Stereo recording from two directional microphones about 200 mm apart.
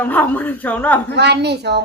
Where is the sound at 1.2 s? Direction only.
55° right (ahead or behind).